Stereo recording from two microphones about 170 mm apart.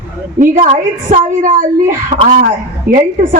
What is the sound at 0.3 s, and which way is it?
A woman's voice, 45° right (ahead or behind).